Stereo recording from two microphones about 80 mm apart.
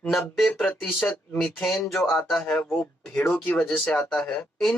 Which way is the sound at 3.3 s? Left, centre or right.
Centre.